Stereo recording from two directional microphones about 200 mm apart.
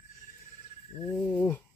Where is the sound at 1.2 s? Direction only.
10° left (ahead or behind).